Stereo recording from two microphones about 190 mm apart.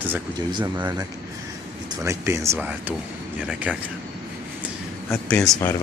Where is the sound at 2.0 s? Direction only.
15° right (ahead or behind).